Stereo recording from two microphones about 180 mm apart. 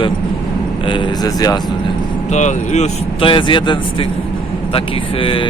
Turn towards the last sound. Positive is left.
turn(degrees=30)  # may be behind; listen again after turning